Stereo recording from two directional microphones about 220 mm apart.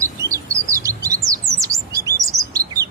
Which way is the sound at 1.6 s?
15° right (ahead or behind).